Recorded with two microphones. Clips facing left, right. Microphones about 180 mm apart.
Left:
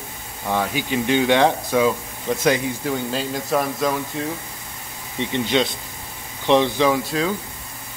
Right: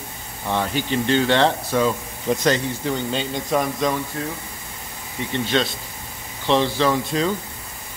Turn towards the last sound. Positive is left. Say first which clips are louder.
# right 1 dB
turn(degrees=5)  # may be behind; listen again after turning